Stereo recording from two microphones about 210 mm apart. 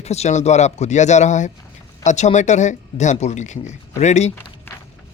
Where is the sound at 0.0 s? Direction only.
30° left (ahead or behind).